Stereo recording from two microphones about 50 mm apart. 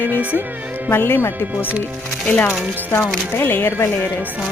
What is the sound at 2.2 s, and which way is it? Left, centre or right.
Speech, left.